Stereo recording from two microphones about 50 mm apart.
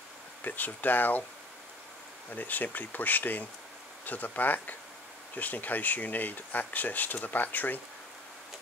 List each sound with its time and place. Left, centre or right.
0.4 s speech: left
2.3 s speech: left